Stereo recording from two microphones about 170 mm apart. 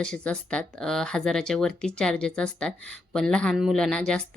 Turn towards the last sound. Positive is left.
turn(degrees=5)  # may be behind; listen again after turning